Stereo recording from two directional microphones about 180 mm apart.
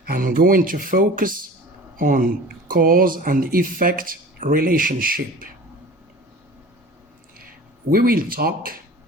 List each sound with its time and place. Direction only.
0.0 s speech: 50° right (ahead or behind)
7.9 s speech: 55° right (ahead or behind)